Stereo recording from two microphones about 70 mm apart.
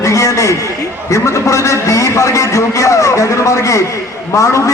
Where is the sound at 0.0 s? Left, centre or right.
Left.